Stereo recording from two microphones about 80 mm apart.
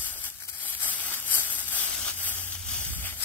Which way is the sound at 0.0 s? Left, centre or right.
Left.